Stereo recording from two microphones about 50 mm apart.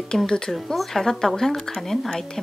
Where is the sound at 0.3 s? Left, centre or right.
Centre.